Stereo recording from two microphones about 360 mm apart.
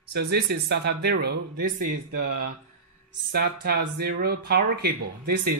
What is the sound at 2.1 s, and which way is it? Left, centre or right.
Speech, right.